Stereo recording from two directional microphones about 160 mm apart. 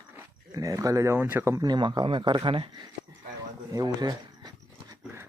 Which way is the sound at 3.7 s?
25° right (ahead or behind).